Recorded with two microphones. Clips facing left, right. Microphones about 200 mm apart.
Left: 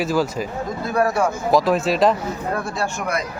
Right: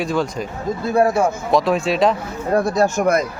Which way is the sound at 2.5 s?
40° right (ahead or behind).